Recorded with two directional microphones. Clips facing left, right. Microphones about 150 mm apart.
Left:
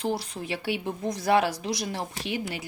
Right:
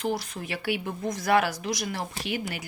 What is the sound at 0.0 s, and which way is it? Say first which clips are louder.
Speech: even; 30° left (ahead or behind).